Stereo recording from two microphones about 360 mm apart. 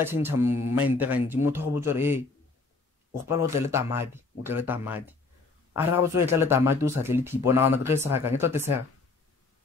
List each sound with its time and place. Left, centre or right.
0.0 s speech: centre
3.4 s speech: centre
6.1 s speech: centre